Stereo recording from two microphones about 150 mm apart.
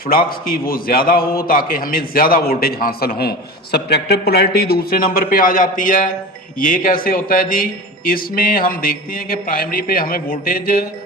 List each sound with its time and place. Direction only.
0.3 s a man's voice: 75° left (ahead or behind)